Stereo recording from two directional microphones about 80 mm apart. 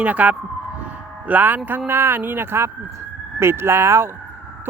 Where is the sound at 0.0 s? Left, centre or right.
Centre.